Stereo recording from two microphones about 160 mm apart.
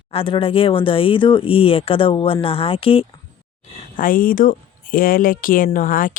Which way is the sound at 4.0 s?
60° left (ahead or behind).